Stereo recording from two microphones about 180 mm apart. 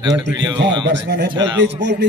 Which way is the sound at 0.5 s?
75° right (ahead or behind).